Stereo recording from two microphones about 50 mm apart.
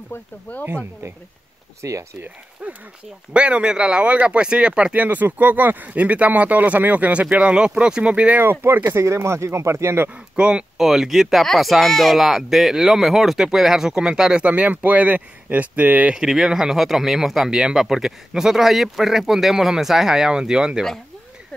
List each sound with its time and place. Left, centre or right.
0.5 s speech: left
1.8 s speech: right
2.6 s speech: right; by 8.0 s centre
8.0 s speech: right
8.4 s speech: right
10.3 s speech: centre
10.9 s speech: centre
14.4 s speech: right
16.1 s speech: centre